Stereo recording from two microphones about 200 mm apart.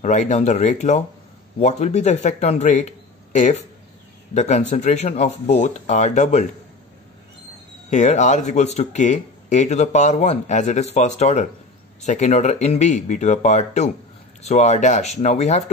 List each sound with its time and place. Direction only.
0.0 s speech: 35° left (ahead or behind)
7.9 s speech: 35° left (ahead or behind)